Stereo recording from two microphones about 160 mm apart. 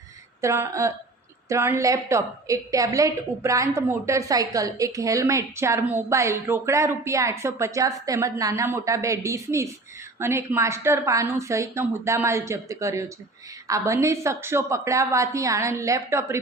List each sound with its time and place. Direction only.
0.4 s a woman's voice: 20° right (ahead or behind)